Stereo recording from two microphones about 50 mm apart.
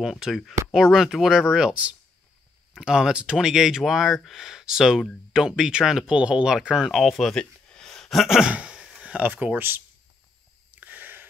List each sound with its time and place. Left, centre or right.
0.0 s speech: centre
1.3 s speech: centre
6.9 s speech: centre
7.3 s a sound: centre
8.5 s speech: right
9.0 s speech: right
10.7 s a sound: right